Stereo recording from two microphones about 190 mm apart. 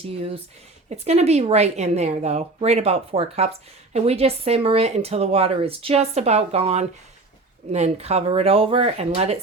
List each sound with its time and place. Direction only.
0.9 s speech: 35° right (ahead or behind)